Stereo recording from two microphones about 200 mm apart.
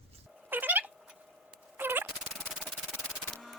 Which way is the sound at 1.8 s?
10° right (ahead or behind).